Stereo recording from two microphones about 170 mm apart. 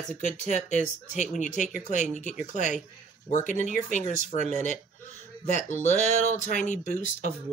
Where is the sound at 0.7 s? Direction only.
45° left (ahead or behind).